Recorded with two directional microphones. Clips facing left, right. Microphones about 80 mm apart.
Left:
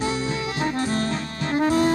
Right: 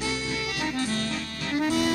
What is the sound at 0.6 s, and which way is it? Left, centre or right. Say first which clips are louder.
Music: left 5 dB; left.